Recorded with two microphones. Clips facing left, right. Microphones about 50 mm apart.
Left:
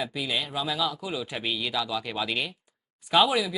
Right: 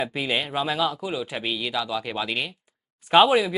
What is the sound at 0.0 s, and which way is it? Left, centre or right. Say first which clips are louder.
Speech: right 4 dB; right.